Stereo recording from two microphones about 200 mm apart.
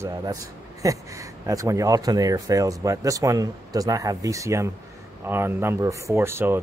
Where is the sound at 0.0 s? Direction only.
20° right (ahead or behind).